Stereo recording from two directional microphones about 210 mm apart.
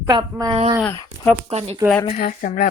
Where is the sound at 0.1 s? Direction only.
20° right (ahead or behind).